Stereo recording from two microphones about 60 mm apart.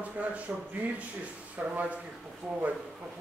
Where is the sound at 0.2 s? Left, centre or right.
Right.